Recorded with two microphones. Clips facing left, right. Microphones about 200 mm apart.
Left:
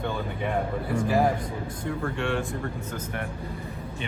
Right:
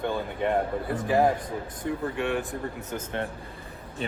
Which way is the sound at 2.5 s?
25° right (ahead or behind).